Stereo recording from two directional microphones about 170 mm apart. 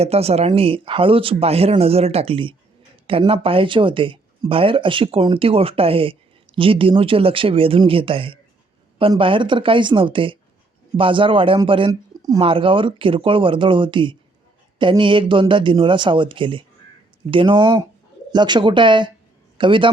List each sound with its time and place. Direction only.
0.0 s speech: 35° right (ahead or behind); by 12.4 s 20° right (ahead or behind)
12.4 s a man's voice: 30° right (ahead or behind)